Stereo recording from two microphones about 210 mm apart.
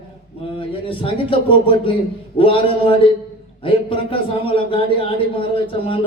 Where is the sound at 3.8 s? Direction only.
25° left (ahead or behind).